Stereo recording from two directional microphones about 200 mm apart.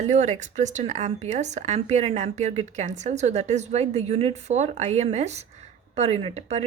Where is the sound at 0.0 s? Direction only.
35° right (ahead or behind).